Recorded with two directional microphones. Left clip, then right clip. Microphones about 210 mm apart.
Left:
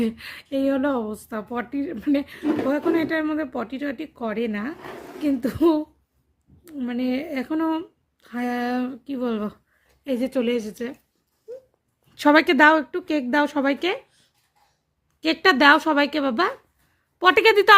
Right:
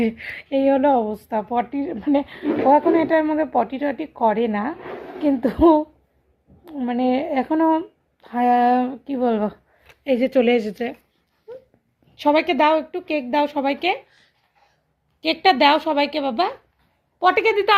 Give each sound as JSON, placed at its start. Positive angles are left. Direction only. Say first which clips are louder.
{"t": 0.0, "sound": "a woman's voice", "louder": "right 4 dB", "side_deg": 15}
{"t": 12.1, "sound": "a woman's voice", "louder": "left 1 dB", "side_deg": 45}
{"t": 15.2, "sound": "a woman's voice", "louder": "right 1 dB", "side_deg": 35}